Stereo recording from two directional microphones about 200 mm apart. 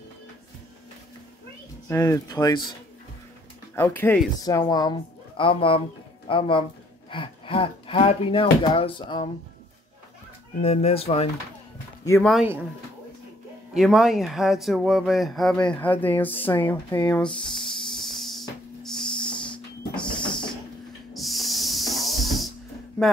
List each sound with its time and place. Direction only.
1.9 s speech: 15° left (ahead or behind)
3.7 s speech: 10° left (ahead or behind)
10.6 s speech: 30° left (ahead or behind)
12.2 s speech: centre (ahead or behind)
13.7 s speech: centre (ahead or behind)
20.0 s a sound: 25° left (ahead or behind)
20.2 s a sound: 5° left (ahead or behind)
21.1 s hiss: centre (ahead or behind)